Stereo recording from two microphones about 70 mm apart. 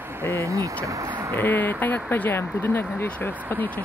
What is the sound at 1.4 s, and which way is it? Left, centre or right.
Speech, left.